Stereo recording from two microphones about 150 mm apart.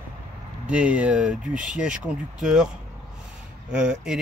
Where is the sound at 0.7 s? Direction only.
10° right (ahead or behind).